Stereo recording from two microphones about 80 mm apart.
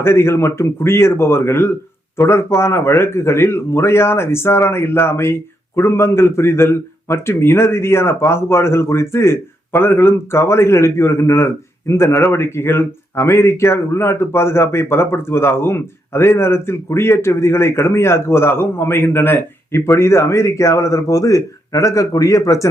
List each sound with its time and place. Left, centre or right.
0.0 s speech: left